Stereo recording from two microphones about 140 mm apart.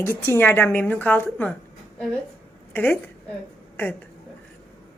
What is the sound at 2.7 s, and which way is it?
Speech, 10° left (ahead or behind).